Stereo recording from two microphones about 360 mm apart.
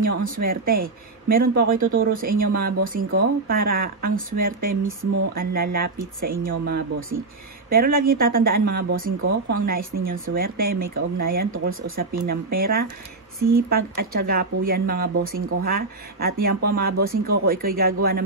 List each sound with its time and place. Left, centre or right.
0.0 s speech: right